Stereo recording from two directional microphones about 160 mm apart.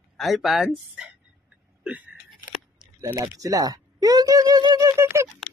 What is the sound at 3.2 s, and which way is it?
Speech, 20° right (ahead or behind).